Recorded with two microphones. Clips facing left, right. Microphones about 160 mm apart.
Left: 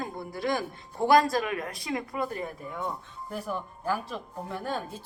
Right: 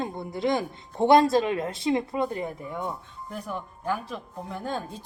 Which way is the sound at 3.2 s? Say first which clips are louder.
Left 1 dB; 5° left (ahead or behind).